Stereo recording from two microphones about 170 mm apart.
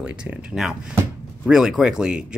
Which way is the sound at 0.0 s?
5° right (ahead or behind).